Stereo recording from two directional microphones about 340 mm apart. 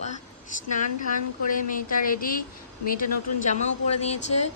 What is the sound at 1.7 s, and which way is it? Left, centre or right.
A woman's voice, left.